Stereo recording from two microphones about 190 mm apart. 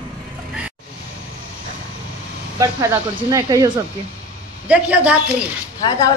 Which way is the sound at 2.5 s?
15° right (ahead or behind).